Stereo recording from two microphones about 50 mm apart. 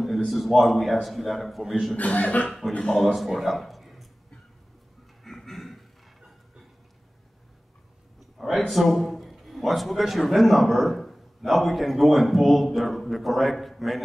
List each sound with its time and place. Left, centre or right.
0.0 s a man's voice: centre
2.0 s speech: left
2.6 s a man's voice: centre
5.2 s a sound: centre
8.2 s a man's voice: centre